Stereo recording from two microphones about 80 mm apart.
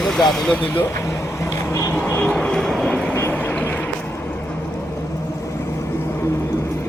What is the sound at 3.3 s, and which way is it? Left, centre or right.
Vehicle, centre.